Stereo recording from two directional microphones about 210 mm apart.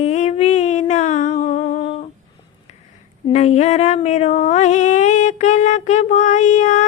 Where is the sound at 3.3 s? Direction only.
30° left (ahead or behind).